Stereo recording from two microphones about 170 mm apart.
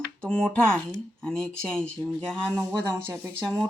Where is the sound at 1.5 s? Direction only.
5° left (ahead or behind).